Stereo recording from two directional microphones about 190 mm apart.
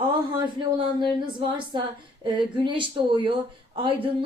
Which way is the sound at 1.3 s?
25° right (ahead or behind).